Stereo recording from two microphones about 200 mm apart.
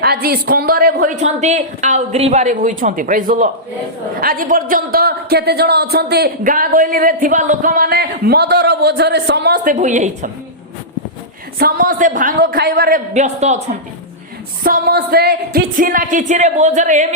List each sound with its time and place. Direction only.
0.0 s a woman's voice: 50° right (ahead or behind)
9.6 s a woman's voice: 40° right (ahead or behind)
11.6 s speech: 45° right (ahead or behind)
14.6 s a woman's voice: 50° right (ahead or behind)